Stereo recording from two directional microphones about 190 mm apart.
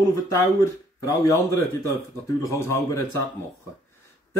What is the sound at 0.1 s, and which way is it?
Speech, 20° left (ahead or behind).